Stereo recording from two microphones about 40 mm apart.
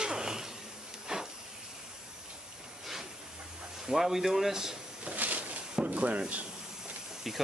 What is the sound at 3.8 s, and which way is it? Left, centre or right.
Speech, centre.